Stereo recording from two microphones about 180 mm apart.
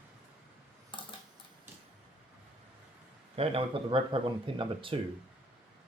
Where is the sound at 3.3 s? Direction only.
35° right (ahead or behind).